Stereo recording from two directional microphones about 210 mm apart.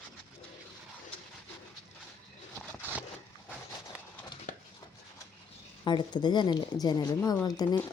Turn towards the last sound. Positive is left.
turn(degrees=20)  # may be behind; listen again after turning